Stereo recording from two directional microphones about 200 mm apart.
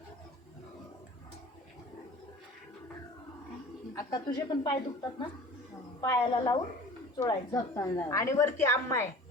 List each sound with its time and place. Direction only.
4.4 s a woman's voice: 25° left (ahead or behind)